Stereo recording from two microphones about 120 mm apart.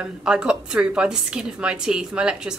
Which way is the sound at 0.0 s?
5° right (ahead or behind).